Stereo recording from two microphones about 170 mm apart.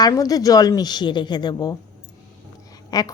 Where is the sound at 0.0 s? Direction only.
20° left (ahead or behind).